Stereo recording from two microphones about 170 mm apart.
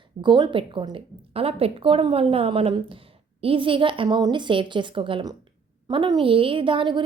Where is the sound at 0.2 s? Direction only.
25° right (ahead or behind).